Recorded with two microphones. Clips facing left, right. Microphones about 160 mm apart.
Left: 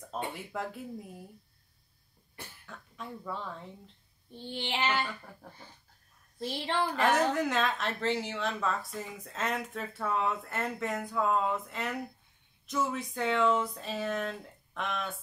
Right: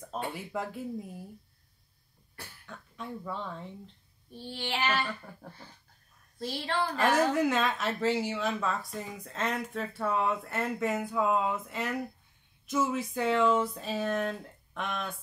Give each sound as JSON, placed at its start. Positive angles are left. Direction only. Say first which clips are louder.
{"t": 0.1, "sound": "speech", "louder": "right 2 dB", "side_deg": 0}
{"t": 2.6, "sound": "speech", "louder": "right 3 dB", "side_deg": 0}
{"t": 4.4, "sound": "child singing", "louder": "even", "side_deg": 20}
{"t": 6.4, "sound": "child singing", "louder": "even", "side_deg": 20}
{"t": 6.9, "sound": "speech", "louder": "right 2 dB", "side_deg": 0}